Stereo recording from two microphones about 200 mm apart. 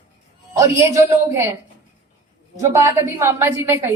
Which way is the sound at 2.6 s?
15° right (ahead or behind).